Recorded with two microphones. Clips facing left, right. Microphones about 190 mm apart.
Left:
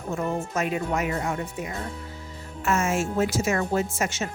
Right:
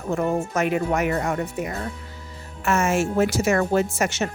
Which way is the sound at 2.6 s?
70° right (ahead or behind).